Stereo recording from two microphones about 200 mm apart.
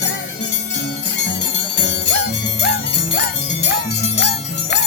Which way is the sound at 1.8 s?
60° left (ahead or behind).